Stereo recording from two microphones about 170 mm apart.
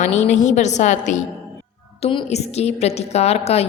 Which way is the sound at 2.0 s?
35° left (ahead or behind).